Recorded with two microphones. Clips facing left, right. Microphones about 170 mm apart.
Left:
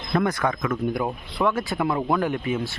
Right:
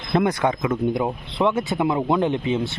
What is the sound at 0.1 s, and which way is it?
Speech, 25° right (ahead or behind).